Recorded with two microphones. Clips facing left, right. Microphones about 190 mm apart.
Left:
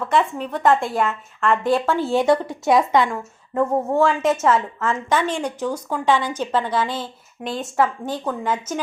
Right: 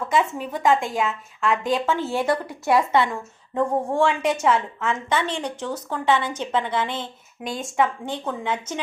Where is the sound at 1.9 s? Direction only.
15° left (ahead or behind).